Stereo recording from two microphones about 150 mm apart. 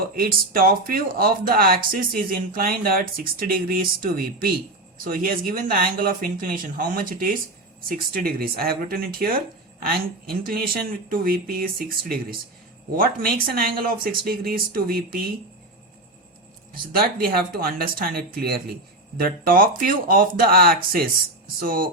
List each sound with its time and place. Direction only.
0.2 s speech: 75° right (ahead or behind)
7.9 s speech: 85° right
17.2 s speech: 85° right
19.1 s speech: 75° right (ahead or behind)